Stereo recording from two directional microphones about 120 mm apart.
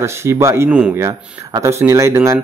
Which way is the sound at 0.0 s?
20° right (ahead or behind).